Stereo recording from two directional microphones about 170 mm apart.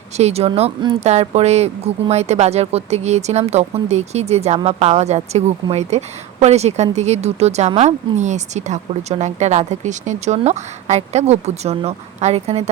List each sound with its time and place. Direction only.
0.2 s speech: 40° right (ahead or behind)